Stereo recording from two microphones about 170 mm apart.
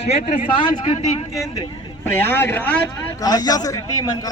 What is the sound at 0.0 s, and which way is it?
Speech, 40° left (ahead or behind).